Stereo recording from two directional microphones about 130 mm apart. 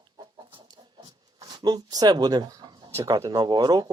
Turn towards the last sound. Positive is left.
turn(degrees=-35)  # may be behind; listen again after turning